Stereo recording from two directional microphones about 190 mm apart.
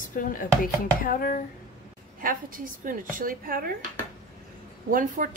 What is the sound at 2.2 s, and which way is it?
A woman's voice, 45° right (ahead or behind).